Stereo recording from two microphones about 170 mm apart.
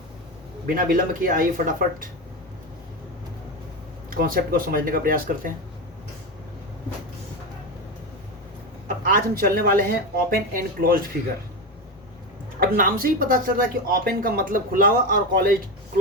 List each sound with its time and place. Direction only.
0.7 s a woman's voice: 55° right (ahead or behind)
4.1 s a woman's voice: 55° right (ahead or behind)
9.0 s a woman's voice: 55° right (ahead or behind)
12.5 s a woman's voice: 60° right (ahead or behind)